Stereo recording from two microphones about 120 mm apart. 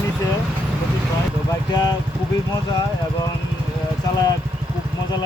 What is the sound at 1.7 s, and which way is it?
Speech, 35° left (ahead or behind).